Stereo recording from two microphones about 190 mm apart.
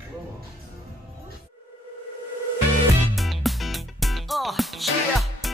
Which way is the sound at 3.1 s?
Centre (ahead or behind).